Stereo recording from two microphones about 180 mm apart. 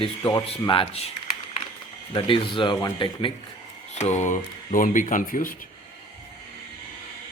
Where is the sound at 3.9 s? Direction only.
40° left (ahead or behind).